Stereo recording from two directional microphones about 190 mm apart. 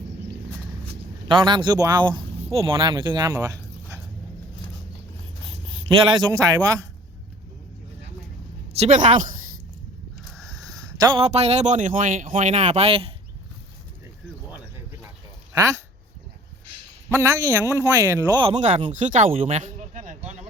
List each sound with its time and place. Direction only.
1.3 s a man's voice: 25° right (ahead or behind)
5.8 s a man's voice: 25° right (ahead or behind)
8.8 s speech: 40° right (ahead or behind)
10.2 s mechanisms: centre (ahead or behind)
10.6 s a sound: 20° right (ahead or behind)
11.3 s speech: 35° right (ahead or behind)
17.1 s a man's voice: 15° right (ahead or behind)
18.5 s speech: 35° right (ahead or behind)